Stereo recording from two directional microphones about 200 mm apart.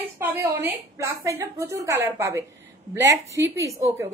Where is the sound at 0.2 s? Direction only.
10° right (ahead or behind).